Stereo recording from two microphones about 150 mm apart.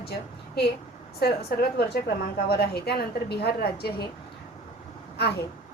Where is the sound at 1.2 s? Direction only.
90° left.